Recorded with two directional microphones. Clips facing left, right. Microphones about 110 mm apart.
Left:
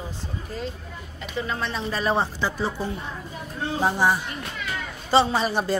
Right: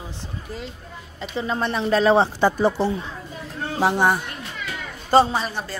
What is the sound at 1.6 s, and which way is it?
Speech, 55° right (ahead or behind).